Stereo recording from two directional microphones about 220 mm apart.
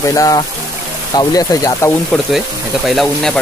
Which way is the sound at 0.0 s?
15° left (ahead or behind).